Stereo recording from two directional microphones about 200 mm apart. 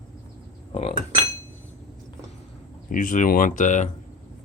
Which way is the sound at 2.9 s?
40° left (ahead or behind).